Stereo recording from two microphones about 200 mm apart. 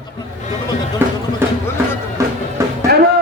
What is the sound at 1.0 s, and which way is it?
Speech, 10° right (ahead or behind).